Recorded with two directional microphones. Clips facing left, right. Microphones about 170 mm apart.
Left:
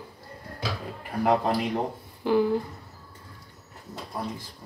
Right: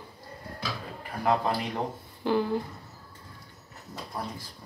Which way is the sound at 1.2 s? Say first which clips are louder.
Left 3 dB; 20° left (ahead or behind).